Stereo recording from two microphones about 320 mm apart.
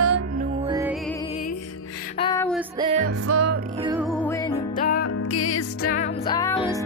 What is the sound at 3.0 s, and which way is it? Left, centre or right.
Music, right.